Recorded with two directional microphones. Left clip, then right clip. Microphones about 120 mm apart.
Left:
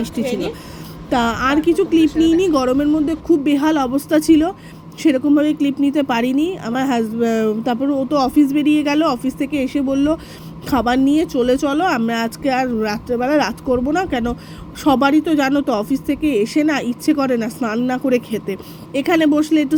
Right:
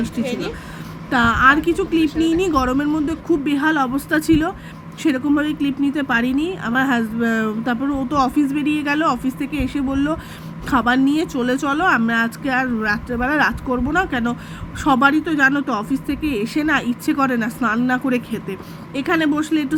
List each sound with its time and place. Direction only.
0.0 s speech: 20° left (ahead or behind)
6.3 s speech: 15° left (ahead or behind)
18.3 s speech: 25° left (ahead or behind)